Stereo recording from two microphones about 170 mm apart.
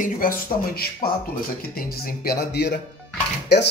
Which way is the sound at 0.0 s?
55° left (ahead or behind).